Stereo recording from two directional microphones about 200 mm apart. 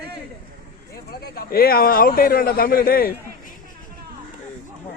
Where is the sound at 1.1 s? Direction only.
50° left (ahead or behind).